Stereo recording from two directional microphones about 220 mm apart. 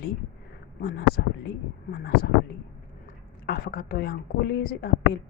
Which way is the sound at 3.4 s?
45° left (ahead or behind).